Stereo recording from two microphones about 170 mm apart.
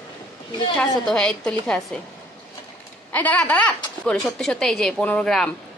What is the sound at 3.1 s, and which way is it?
Speech, 10° left (ahead or behind).